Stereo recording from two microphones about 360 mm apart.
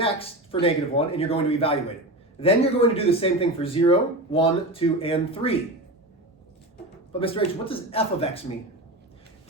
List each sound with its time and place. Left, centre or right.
0.6 s speech: centre
7.1 s speech: centre